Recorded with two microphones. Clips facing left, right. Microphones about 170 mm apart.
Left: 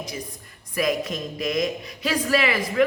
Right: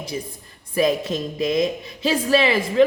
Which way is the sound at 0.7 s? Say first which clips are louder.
Right 4 dB; 30° right (ahead or behind).